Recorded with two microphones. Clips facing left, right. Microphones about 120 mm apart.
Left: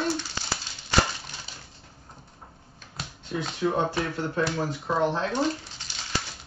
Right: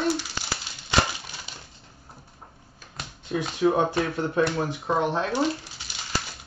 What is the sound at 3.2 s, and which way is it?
Speech, 15° right (ahead or behind).